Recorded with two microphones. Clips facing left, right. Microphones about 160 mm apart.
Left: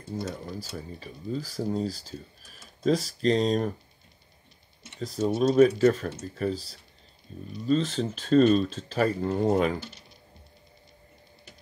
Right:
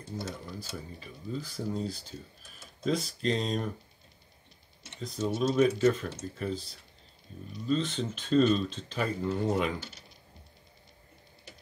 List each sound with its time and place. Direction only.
0.1 s speech: 50° left (ahead or behind)
5.1 s speech: 40° left (ahead or behind)